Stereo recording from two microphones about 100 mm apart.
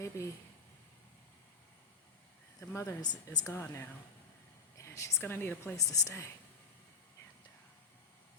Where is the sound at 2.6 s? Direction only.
30° left (ahead or behind).